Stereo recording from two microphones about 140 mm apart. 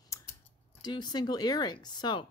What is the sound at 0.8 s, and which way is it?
Speech, 30° left (ahead or behind).